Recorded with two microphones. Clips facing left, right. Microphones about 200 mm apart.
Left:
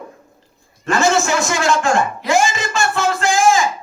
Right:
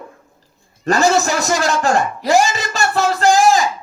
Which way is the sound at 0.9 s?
40° right (ahead or behind).